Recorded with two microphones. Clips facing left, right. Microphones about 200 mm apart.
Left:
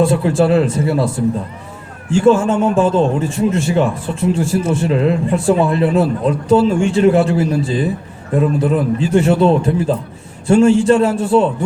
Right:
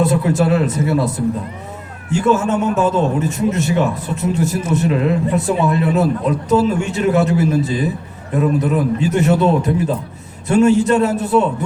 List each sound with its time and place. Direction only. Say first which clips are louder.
0.0 s a man's voice: left 2 dB; 30° left (ahead or behind)